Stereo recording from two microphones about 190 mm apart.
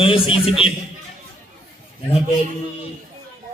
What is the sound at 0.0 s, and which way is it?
Speech, 30° left (ahead or behind).